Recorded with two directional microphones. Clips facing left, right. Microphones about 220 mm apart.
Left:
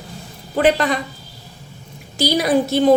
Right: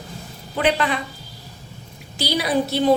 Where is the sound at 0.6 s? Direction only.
40° left (ahead or behind).